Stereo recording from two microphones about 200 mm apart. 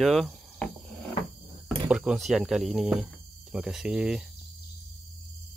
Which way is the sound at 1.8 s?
5° right (ahead or behind).